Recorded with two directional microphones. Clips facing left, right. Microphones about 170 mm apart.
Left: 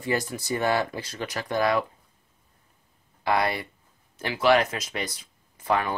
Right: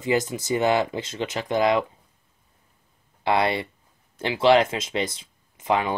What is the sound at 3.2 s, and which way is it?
Speech, 25° right (ahead or behind).